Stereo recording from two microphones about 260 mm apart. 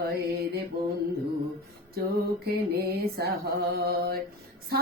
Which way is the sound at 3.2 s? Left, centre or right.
Right.